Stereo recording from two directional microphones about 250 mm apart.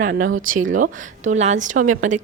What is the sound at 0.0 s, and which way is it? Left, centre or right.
Speech, right.